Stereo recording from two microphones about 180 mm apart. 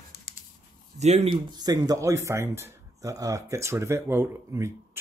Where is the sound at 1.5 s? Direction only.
20° right (ahead or behind).